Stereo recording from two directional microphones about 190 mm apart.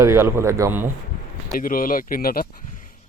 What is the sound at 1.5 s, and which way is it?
Speech, 50° left (ahead or behind).